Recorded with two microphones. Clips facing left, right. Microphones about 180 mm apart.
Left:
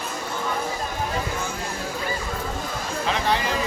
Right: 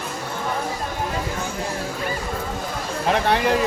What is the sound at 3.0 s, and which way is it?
Speech, 55° right (ahead or behind).